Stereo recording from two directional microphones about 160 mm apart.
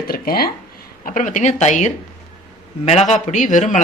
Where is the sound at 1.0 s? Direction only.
55° left (ahead or behind).